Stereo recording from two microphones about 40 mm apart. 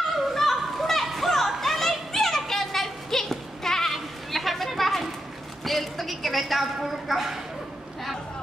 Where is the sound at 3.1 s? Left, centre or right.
Centre.